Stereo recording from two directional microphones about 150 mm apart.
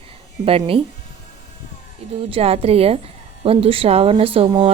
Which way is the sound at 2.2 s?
40° right (ahead or behind).